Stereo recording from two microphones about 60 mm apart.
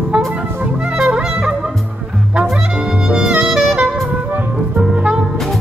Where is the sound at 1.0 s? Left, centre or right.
Centre.